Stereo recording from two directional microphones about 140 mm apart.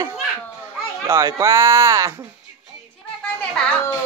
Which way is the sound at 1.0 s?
20° right (ahead or behind).